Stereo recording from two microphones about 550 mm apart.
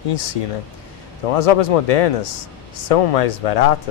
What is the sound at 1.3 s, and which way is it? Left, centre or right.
Speech, left.